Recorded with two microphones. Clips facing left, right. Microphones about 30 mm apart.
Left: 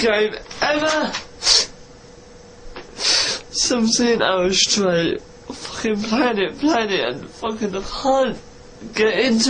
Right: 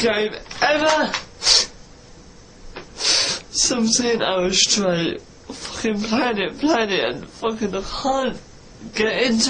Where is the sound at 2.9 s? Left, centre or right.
Centre.